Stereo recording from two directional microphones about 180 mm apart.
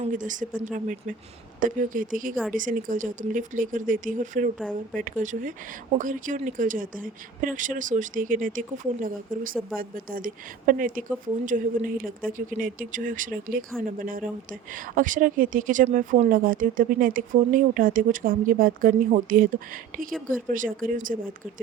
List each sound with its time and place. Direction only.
0.0 s a woman's voice: 45° right (ahead or behind)